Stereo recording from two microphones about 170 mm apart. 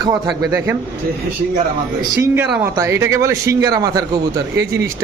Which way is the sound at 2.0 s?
20° right (ahead or behind).